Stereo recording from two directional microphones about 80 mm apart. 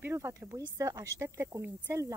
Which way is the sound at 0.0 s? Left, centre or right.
Right.